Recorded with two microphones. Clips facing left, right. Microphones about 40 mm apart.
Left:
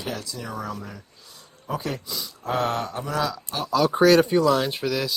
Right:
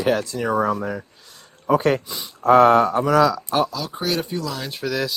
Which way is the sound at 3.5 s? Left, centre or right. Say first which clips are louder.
Right 10 dB; right.